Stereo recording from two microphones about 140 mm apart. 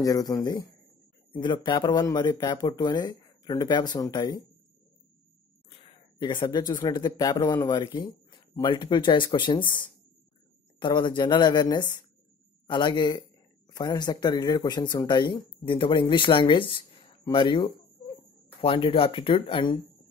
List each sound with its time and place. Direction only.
0.0 s speech: 25° left (ahead or behind)
6.1 s speech: 35° left (ahead or behind)
10.8 s speech: 35° left (ahead or behind)